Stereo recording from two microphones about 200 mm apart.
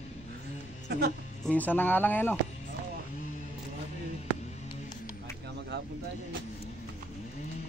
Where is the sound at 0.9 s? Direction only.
55° right (ahead or behind).